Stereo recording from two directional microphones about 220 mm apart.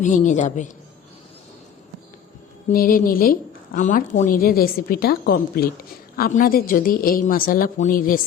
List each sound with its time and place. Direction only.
0.0 s a woman's voice: 35° left (ahead or behind)
2.6 s a woman's voice: 40° left (ahead or behind)